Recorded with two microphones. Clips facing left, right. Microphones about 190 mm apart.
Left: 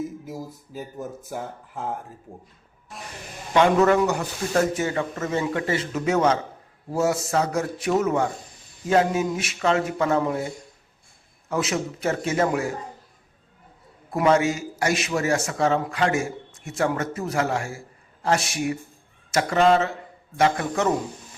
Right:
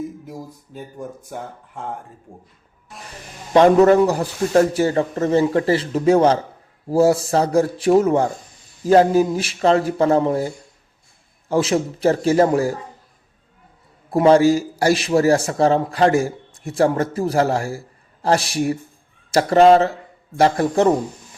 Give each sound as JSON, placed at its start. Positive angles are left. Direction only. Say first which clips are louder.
{"t": 0.3, "sound": "speech", "louder": "even", "side_deg": 0}
{"t": 2.9, "sound": "a sound", "louder": "even", "side_deg": 0}
{"t": 3.5, "sound": "a man's voice", "louder": "right 6 dB", "side_deg": -35}
{"t": 14.1, "sound": "a man's voice", "louder": "right 7 dB", "side_deg": -30}